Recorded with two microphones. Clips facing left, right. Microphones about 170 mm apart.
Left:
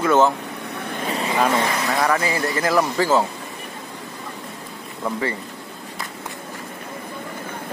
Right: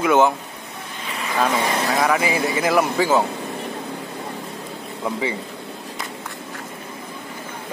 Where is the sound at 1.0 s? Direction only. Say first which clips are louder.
Left 5 dB; 35° left (ahead or behind).